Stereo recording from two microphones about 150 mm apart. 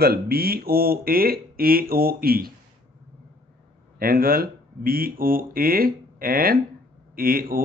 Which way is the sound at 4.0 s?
80° right.